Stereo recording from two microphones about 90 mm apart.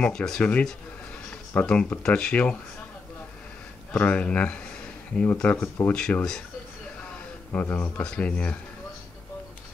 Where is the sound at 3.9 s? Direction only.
15° left (ahead or behind).